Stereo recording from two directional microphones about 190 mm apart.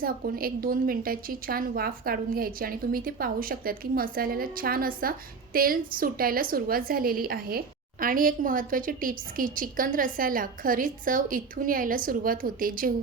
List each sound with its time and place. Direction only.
0.0 s a woman's voice: 50° right (ahead or behind)